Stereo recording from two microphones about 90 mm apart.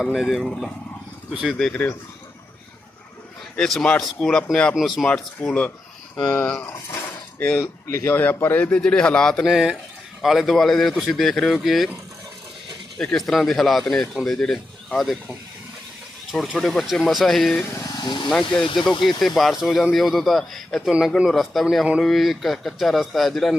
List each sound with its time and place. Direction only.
0.0 s speech: centre (ahead or behind)
1.3 s speech: 10° right (ahead or behind)
1.7 s speech: 20° left (ahead or behind)
3.5 s a man's voice: 5° left (ahead or behind)
5.0 s a man's voice: 10° left (ahead or behind)
7.9 s a man's voice: 30° left (ahead or behind); by 9.5 s 5° left (ahead or behind)
9.5 s speech: 5° right (ahead or behind)
13.0 s speech: 5° left (ahead or behind)
18.0 s speech: 60° left (ahead or behind)
18.3 s speech: 5° left (ahead or behind)